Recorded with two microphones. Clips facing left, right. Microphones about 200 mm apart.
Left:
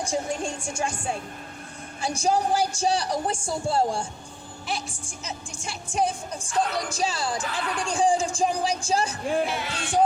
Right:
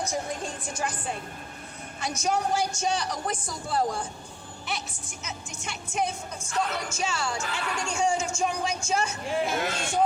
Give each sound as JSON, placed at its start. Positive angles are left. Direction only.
{"t": 0.0, "sound": "speech", "side_deg": 30}
{"t": 2.0, "sound": "speech", "side_deg": 30}
{"t": 9.5, "sound": "speech", "side_deg": -50}